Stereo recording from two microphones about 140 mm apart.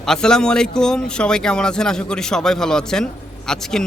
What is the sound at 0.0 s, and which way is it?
A man's voice, 5° left (ahead or behind).